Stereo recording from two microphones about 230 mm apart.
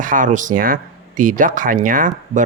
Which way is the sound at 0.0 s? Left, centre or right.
Right.